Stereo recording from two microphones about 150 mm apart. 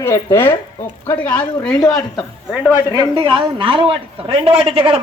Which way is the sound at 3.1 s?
35° right (ahead or behind).